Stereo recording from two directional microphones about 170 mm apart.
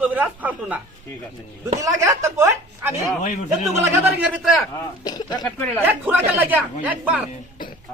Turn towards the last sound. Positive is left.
turn(degrees=55)  # may be behind; listen again after turning